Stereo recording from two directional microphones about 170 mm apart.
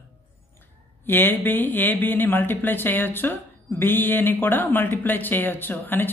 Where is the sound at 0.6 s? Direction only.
10° left (ahead or behind).